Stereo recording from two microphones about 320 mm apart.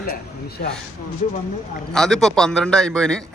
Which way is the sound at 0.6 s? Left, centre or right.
Left.